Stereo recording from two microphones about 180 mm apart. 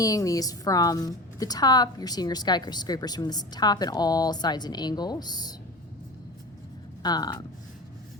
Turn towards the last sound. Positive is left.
turn(degrees=25)  # may be behind; listen again after turning